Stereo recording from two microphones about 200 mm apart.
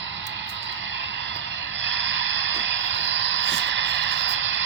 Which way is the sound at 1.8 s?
65° right (ahead or behind).